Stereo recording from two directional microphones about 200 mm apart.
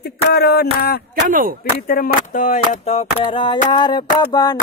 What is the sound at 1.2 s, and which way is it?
Speech, 45° right (ahead or behind).